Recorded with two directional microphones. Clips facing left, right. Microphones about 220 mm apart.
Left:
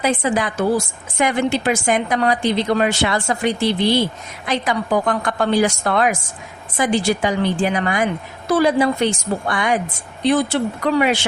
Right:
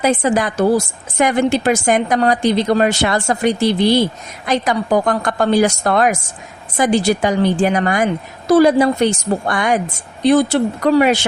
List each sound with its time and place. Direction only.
0.0 s a woman's voice: 45° right (ahead or behind)